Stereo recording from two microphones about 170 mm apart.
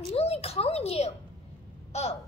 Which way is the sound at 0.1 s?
35° left (ahead or behind).